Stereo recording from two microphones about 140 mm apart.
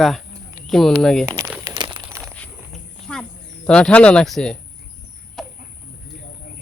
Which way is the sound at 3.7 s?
5° left (ahead or behind).